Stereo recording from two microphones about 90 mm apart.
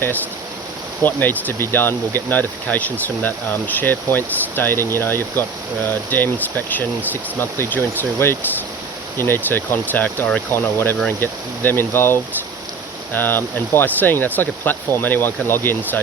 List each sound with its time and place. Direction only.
1.0 s speech: 20° left (ahead or behind)